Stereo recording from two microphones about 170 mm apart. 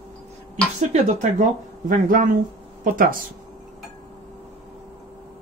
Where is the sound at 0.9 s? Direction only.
45° right (ahead or behind).